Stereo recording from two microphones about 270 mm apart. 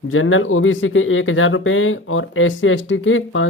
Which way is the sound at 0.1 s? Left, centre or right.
Left.